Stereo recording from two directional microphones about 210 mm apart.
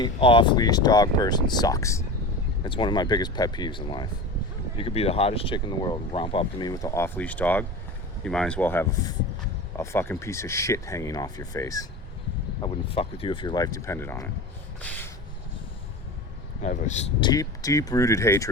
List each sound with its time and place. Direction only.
0.0 s speech: 25° left (ahead or behind)
14.8 s gasp: 5° left (ahead or behind)
16.6 s speech: 35° left (ahead or behind)
17.2 s speech: 20° left (ahead or behind)